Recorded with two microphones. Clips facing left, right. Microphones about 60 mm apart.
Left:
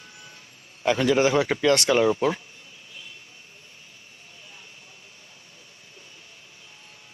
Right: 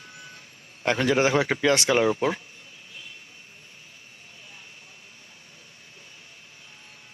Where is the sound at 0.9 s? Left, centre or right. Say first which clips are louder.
Left 1 dB; right.